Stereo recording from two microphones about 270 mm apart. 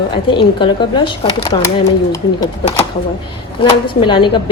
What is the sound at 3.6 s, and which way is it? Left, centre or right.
Speech, centre.